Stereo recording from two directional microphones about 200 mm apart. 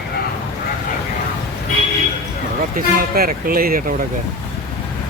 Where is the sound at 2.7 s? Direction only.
45° right (ahead or behind).